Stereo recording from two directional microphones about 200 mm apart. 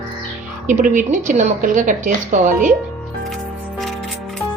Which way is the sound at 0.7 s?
40° right (ahead or behind).